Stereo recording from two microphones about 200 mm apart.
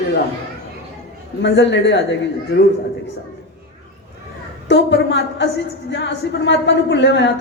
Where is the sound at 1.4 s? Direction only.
60° left (ahead or behind).